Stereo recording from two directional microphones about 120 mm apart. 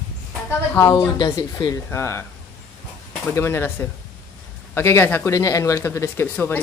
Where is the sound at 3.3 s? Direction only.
20° left (ahead or behind).